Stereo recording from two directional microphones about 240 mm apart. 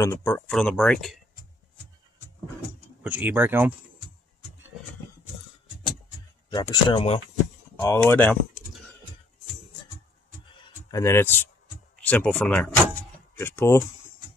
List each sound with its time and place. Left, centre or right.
0.0 s speech: centre
3.0 s speech: centre
6.5 s speech: centre
7.8 s speech: centre
10.9 s speech: centre